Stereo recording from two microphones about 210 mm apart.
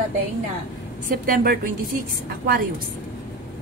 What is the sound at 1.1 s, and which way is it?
Speech, 45° right (ahead or behind).